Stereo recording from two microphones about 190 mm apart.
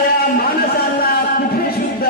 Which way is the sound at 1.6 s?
55° left (ahead or behind).